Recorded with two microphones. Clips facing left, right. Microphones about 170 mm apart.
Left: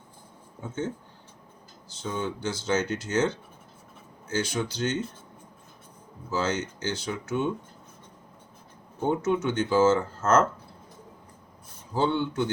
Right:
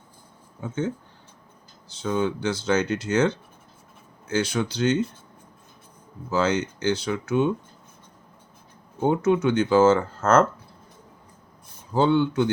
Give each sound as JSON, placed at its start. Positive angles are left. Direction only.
{"t": 2.0, "sound": "speech", "side_deg": -70}
{"t": 6.3, "sound": "speech", "side_deg": -60}
{"t": 9.0, "sound": "speech", "side_deg": -70}
{"t": 11.9, "sound": "speech", "side_deg": -65}